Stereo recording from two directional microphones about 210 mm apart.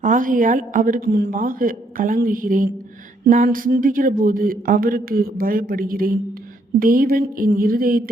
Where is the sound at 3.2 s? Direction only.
40° right (ahead or behind).